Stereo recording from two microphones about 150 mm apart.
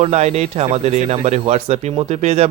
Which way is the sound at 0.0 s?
45° right (ahead or behind).